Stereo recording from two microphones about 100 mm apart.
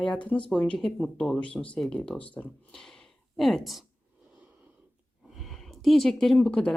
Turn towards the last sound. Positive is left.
turn(degrees=10)  # may be behind; listen again after turning